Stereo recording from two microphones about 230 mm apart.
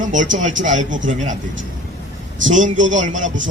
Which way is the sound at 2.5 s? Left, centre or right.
Right.